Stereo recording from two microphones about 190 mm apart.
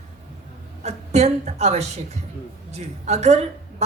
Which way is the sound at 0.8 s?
35° right (ahead or behind).